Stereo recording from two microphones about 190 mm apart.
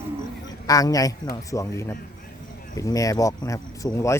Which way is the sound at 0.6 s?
20° left (ahead or behind).